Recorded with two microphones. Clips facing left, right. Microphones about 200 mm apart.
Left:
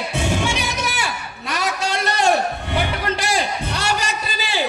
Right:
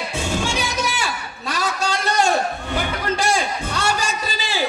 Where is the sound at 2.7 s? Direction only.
65° left (ahead or behind).